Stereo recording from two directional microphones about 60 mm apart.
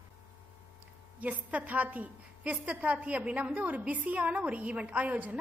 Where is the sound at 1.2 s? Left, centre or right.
Right.